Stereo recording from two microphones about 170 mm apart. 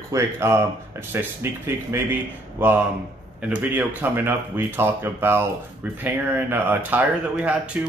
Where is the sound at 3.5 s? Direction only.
10° right (ahead or behind).